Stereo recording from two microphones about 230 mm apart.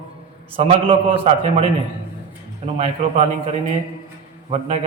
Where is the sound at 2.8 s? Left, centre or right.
Right.